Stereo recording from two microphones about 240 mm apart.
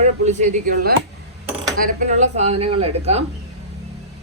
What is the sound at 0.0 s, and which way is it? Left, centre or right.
A woman's voice, right.